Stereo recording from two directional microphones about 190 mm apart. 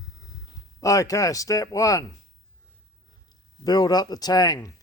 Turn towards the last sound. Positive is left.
turn(degrees=20)  # may be behind; listen again after turning